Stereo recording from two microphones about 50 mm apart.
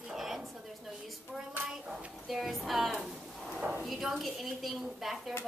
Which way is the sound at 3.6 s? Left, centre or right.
Right.